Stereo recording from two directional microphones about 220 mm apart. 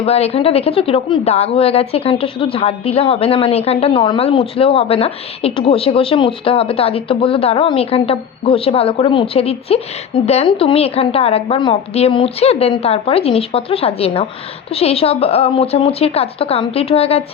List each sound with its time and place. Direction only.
0.0 s speech: 30° left (ahead or behind)